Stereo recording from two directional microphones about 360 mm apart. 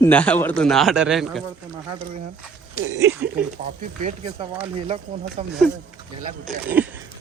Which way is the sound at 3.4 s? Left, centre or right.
Right.